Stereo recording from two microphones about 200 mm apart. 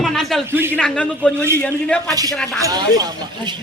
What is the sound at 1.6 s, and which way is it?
Speech, 5° left (ahead or behind).